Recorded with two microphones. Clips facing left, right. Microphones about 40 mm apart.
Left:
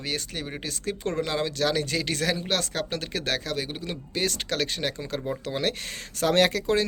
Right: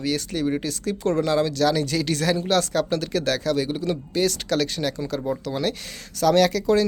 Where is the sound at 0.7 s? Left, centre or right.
Left.